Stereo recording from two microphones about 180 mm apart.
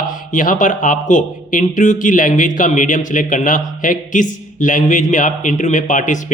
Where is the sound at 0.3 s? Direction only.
45° left (ahead or behind).